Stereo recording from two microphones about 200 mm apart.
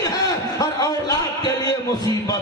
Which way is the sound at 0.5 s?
15° left (ahead or behind).